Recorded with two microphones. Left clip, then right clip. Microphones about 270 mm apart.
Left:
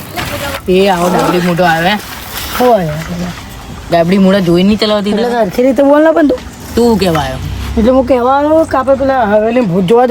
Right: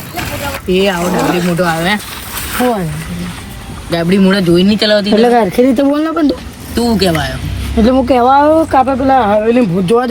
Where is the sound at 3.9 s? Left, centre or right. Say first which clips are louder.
Left 3 dB; left.